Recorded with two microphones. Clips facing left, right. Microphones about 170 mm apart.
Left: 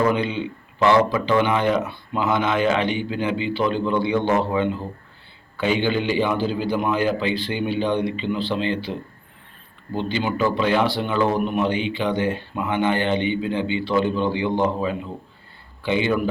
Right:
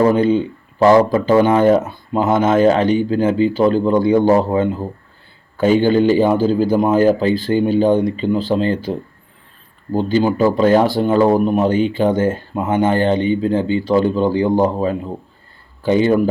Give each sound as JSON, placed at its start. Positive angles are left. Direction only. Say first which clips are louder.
{"t": 0.0, "sound": "speech", "louder": "right 8 dB", "side_deg": -40}